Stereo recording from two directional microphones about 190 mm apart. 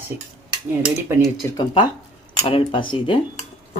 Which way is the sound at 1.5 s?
25° left (ahead or behind).